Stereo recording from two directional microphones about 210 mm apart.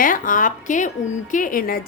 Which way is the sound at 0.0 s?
40° left (ahead or behind).